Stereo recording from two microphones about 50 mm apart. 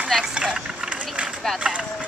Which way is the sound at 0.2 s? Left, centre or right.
Centre.